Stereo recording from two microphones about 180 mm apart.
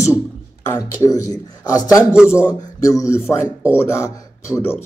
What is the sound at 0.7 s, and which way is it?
Speech, 15° left (ahead or behind).